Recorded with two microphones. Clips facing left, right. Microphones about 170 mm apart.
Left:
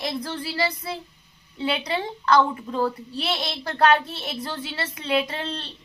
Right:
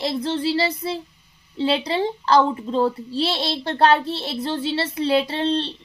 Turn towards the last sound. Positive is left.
turn(degrees=-30)  # may be behind; listen again after turning